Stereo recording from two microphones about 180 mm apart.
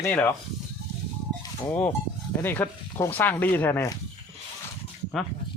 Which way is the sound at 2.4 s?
10° left (ahead or behind).